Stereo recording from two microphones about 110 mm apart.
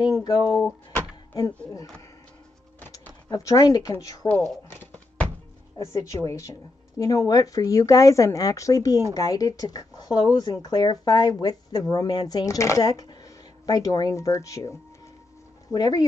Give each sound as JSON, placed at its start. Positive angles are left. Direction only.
{"t": 0.0, "sound": "speech", "side_deg": 40}
{"t": 2.9, "sound": "a sound", "side_deg": 30}
{"t": 4.0, "sound": "speech", "side_deg": 35}
{"t": 4.6, "sound": "a sound", "side_deg": 15}
{"t": 5.8, "sound": "speech", "side_deg": 30}
{"t": 15.7, "sound": "speech", "side_deg": 35}